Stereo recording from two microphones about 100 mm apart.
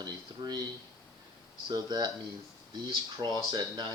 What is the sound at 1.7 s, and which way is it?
Speech, 45° right (ahead or behind).